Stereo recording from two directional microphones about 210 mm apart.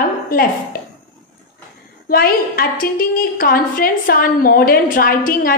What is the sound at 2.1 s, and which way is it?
A woman's voice, 45° left (ahead or behind).